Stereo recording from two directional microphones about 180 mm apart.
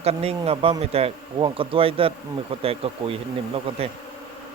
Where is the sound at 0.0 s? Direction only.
35° right (ahead or behind).